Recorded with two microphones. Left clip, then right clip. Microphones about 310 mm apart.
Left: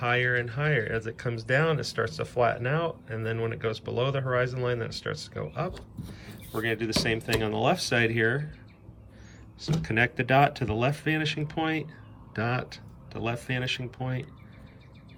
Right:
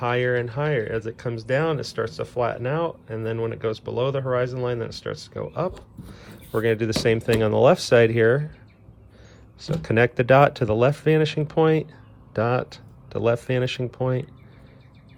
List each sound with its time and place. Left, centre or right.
0.0 s speech: centre
9.8 s speech: centre